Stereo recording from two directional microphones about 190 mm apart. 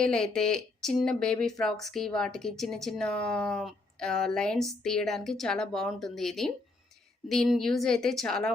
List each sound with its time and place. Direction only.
0.0 s speech: 5° left (ahead or behind)